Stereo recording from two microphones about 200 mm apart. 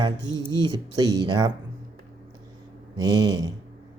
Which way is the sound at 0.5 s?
20° right (ahead or behind).